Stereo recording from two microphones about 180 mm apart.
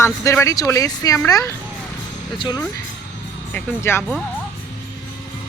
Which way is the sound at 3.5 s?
10° left (ahead or behind).